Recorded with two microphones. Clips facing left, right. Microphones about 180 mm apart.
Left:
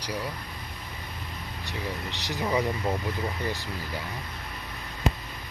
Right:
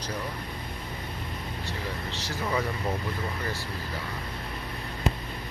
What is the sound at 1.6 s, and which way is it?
Speech, 15° left (ahead or behind).